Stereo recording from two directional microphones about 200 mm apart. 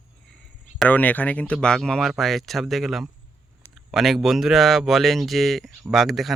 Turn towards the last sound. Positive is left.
turn(degrees=0)  # may be behind; listen again after turning